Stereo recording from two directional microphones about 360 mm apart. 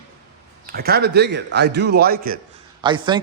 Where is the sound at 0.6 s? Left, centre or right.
Right.